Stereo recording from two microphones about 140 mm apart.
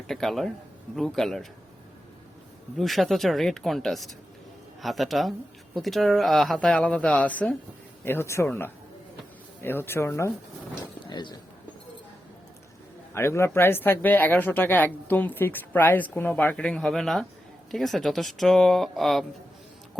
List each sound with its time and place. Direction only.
0.1 s speech: centre (ahead or behind)
2.7 s speech: centre (ahead or behind); by 10.3 s 20° left (ahead or behind)
10.8 s speech: 30° left (ahead or behind)
13.1 s speech: 20° left (ahead or behind); by 19.2 s centre (ahead or behind)